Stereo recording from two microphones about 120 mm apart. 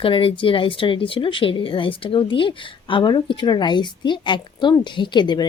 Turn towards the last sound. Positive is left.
turn(degrees=40)  # may be behind; listen again after turning